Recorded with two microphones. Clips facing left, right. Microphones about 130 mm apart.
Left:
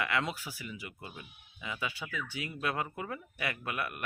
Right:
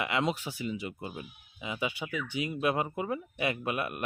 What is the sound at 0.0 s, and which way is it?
Speech, 20° right (ahead or behind).